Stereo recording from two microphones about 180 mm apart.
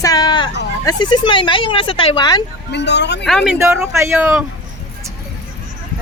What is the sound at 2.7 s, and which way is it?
Speech, 70° left (ahead or behind).